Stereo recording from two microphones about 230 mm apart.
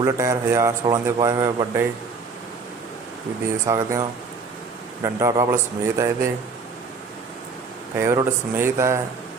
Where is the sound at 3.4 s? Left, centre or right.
Centre.